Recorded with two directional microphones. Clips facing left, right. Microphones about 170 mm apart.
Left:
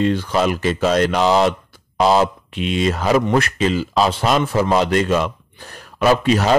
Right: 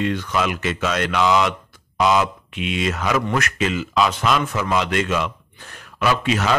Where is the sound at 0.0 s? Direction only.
30° left (ahead or behind).